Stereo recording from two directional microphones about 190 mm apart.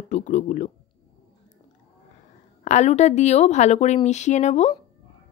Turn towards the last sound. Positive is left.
turn(degrees=35)  # may be behind; listen again after turning